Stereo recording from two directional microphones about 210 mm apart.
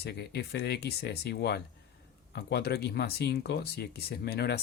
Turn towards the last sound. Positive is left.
turn(degrees=50)  # may be behind; listen again after turning